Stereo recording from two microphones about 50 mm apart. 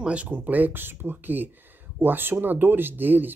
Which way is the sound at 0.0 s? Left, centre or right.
Right.